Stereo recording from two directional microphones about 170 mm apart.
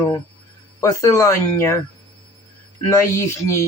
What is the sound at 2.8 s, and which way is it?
Speech, 15° left (ahead or behind).